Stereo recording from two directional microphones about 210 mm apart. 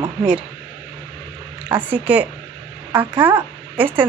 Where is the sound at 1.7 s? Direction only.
10° right (ahead or behind).